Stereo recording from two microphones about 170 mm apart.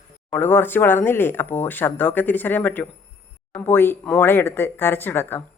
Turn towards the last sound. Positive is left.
turn(degrees=10)  # may be behind; listen again after turning